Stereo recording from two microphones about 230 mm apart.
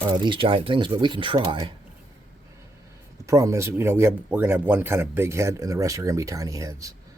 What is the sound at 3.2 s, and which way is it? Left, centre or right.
Speech, centre.